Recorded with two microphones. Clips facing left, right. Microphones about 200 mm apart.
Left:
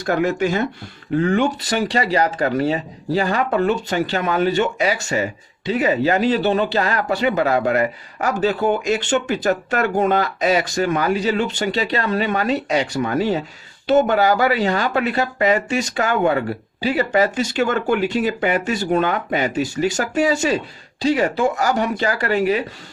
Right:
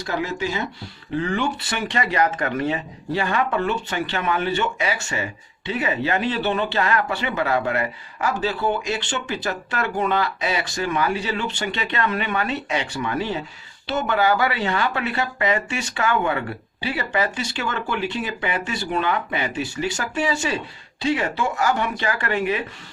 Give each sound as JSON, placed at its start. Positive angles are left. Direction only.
{"t": 0.0, "sound": "speech", "side_deg": 55}